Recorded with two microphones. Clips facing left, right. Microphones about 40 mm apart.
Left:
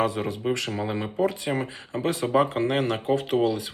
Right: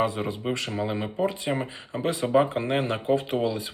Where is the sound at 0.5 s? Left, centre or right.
Right.